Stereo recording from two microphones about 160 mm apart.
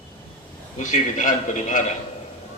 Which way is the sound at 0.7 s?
50° left (ahead or behind).